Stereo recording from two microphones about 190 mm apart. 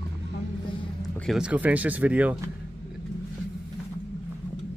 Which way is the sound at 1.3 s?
5° right (ahead or behind).